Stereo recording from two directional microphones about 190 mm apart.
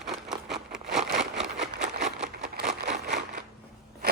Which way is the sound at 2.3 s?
60° right (ahead or behind).